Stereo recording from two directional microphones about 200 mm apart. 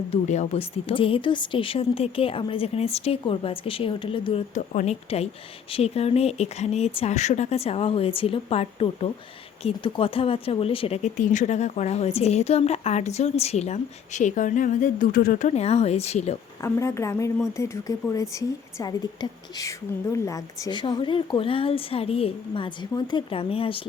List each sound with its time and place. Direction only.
0.1 s speech: 35° left (ahead or behind)
16.6 s speech: 15° left (ahead or behind)